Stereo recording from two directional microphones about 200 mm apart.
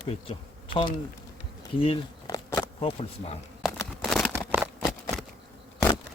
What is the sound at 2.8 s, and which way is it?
Speech, 30° left (ahead or behind).